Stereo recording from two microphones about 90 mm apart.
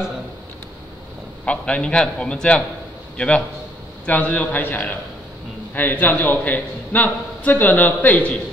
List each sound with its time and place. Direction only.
1.4 s a man's voice: 15° left (ahead or behind)